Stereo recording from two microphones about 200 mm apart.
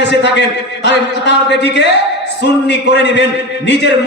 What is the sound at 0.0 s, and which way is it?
A man's voice, 60° left (ahead or behind).